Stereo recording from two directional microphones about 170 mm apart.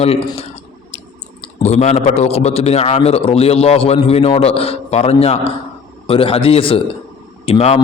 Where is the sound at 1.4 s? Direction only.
40° left (ahead or behind).